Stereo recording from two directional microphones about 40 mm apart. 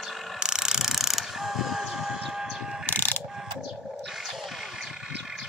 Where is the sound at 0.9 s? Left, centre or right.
Centre.